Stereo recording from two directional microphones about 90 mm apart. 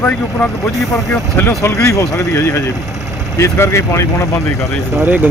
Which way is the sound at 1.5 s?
35° left (ahead or behind).